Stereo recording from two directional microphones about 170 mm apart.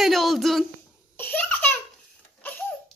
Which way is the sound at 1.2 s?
10° left (ahead or behind).